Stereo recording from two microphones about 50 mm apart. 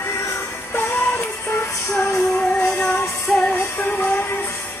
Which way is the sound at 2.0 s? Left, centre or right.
Left.